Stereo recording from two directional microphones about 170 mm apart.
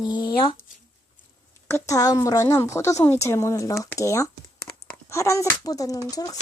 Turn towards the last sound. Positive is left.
turn(degrees=20)  # may be behind; listen again after turning